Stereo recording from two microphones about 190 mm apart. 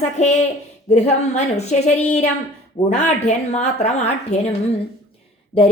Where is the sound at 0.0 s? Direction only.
35° left (ahead or behind).